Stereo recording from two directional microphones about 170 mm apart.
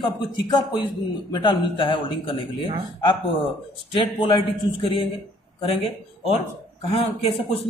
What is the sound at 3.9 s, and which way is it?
A man's voice, 30° left (ahead or behind).